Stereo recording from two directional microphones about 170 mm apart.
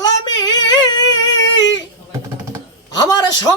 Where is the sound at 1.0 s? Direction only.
90° left.